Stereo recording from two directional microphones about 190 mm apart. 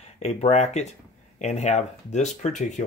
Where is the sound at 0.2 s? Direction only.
35° left (ahead or behind).